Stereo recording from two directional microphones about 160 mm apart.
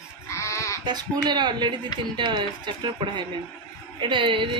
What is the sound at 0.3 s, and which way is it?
Sheep, 20° left (ahead or behind).